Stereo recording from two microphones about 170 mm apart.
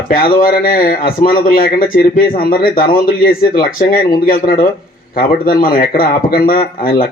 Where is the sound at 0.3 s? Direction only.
55° left (ahead or behind).